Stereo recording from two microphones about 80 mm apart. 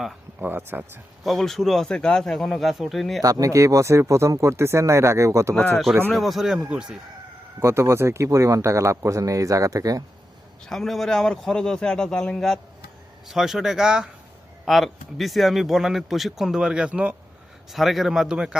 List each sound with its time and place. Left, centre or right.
0.3 s speech: right
1.2 s speech: centre
3.2 s speech: right
6.1 s speech: centre
7.6 s speech: right
10.7 s a man's voice: centre
13.2 s speech: centre
17.7 s speech: centre